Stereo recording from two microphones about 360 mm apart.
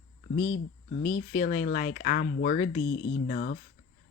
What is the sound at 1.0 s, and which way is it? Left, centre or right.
Speech, centre.